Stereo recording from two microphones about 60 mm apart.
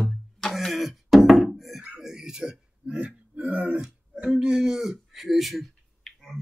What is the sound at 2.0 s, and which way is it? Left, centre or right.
Burping, centre.